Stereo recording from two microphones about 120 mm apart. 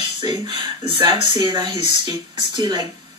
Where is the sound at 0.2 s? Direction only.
40° right (ahead or behind).